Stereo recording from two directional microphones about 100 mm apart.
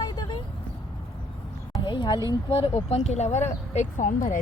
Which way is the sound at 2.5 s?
75° left (ahead or behind).